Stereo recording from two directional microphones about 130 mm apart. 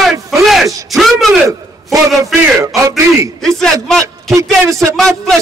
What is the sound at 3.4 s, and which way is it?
A man's voice, 5° left (ahead or behind).